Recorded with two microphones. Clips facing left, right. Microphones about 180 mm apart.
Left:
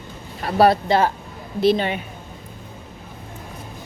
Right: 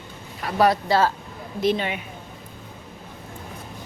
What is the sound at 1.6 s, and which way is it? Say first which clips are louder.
Speech: left 5 dB; 35° left (ahead or behind).